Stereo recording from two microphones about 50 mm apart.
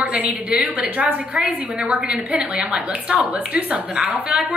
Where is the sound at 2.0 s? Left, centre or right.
Centre.